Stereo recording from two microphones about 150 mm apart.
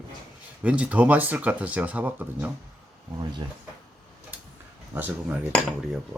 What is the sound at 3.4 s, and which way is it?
Speech, 35° right (ahead or behind).